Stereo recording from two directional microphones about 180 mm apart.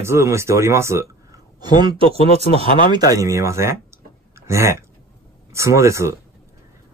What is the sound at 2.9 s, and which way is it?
Speech, 20° right (ahead or behind).